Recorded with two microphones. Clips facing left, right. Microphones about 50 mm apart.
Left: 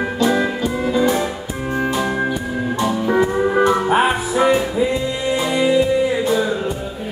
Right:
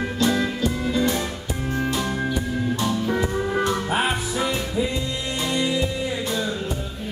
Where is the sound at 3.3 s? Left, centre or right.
Left.